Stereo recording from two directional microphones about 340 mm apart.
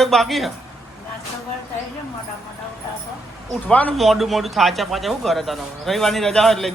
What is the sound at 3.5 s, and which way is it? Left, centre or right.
Speech, centre.